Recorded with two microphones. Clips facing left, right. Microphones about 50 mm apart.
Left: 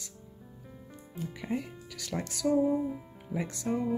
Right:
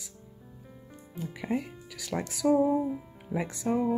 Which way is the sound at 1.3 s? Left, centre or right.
Centre.